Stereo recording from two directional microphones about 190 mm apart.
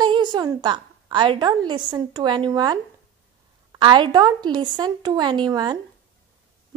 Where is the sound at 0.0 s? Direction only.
25° right (ahead or behind).